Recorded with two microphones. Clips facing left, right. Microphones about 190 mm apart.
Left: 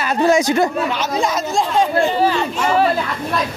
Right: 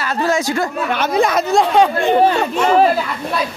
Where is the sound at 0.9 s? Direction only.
60° right (ahead or behind).